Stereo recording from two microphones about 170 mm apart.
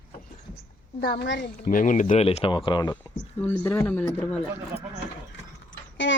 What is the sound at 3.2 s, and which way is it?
Speech, 10° left (ahead or behind).